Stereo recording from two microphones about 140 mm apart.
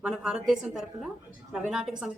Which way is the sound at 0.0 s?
5° right (ahead or behind).